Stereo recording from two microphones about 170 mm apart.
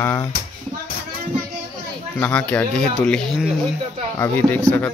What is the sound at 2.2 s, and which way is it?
Speech, 5° left (ahead or behind).